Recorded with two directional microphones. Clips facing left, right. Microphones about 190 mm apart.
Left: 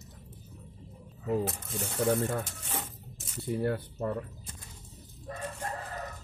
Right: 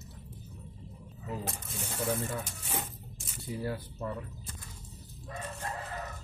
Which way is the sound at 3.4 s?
60° left (ahead or behind).